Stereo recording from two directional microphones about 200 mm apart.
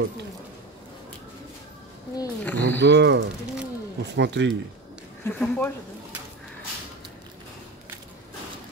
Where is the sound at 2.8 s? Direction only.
60° right (ahead or behind).